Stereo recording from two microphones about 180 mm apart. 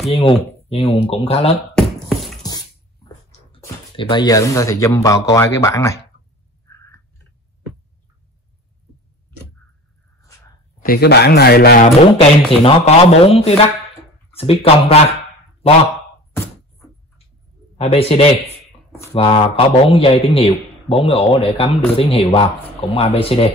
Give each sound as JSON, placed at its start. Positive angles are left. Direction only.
{"t": 0.1, "sound": "a man's voice", "side_deg": 30}
{"t": 1.8, "sound": "beatboxing", "side_deg": 0}
{"t": 3.3, "sound": "speech", "side_deg": 30}
{"t": 6.7, "sound": "a sound", "side_deg": 15}
{"t": 10.8, "sound": "speech", "side_deg": 60}
{"t": 11.8, "sound": "a man's voice", "side_deg": 35}
{"t": 17.7, "sound": "a man's voice", "side_deg": 35}